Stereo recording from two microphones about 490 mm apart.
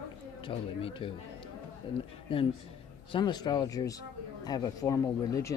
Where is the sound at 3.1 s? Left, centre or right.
Centre.